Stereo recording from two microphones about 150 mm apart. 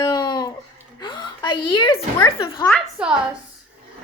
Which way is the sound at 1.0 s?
30° left (ahead or behind).